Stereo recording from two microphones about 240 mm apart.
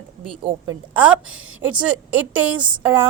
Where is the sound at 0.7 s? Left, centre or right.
Centre.